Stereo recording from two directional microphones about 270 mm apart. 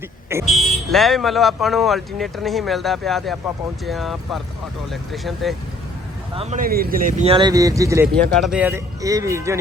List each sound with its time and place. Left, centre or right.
0.4 s speech: centre
6.3 s speech: right